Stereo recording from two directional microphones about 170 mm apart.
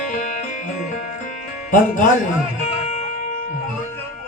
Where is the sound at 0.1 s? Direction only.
50° left (ahead or behind).